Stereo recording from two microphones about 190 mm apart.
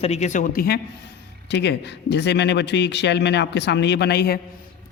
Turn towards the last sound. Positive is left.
turn(degrees=55)  # may be behind; listen again after turning